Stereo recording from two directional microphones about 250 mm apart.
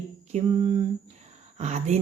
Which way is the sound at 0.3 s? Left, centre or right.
Right.